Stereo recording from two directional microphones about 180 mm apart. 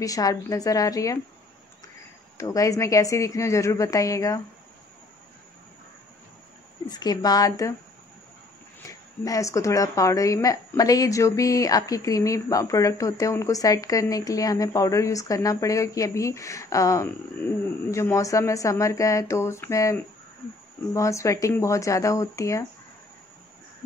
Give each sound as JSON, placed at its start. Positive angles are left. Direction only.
{"t": 0.0, "sound": "speech", "side_deg": 20}
{"t": 2.3, "sound": "a woman's voice", "side_deg": 20}
{"t": 6.9, "sound": "speech", "side_deg": 20}
{"t": 8.8, "sound": "a woman's voice", "side_deg": 20}